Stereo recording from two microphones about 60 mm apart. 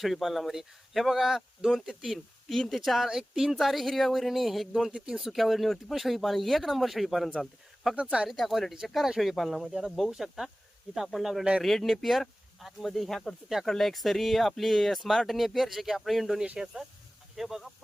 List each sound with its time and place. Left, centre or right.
0.0 s speech: centre
7.9 s speech: centre
8.3 s speech: centre